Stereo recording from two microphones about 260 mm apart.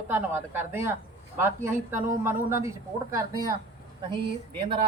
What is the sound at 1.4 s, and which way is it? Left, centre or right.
A man's voice, centre.